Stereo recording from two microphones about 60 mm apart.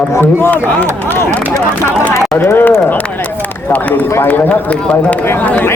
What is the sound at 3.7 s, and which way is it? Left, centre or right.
Speech, left.